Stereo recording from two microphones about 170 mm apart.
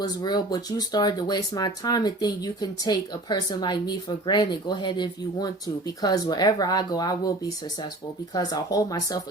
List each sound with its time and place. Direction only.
0.0 s speech: 25° left (ahead or behind)